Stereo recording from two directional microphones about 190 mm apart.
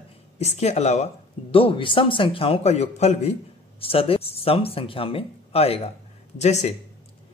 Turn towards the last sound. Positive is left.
turn(degrees=35)  # may be behind; listen again after turning